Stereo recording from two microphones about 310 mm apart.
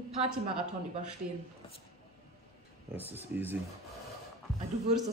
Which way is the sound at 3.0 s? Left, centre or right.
Centre.